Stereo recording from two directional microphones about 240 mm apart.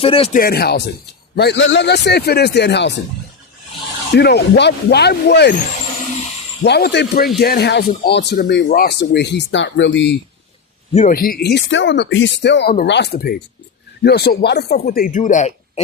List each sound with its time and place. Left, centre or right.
0.0 s speech: left
0.3 s speech: left
4.1 s speech: left
6.6 s speech: left
10.9 s speech: left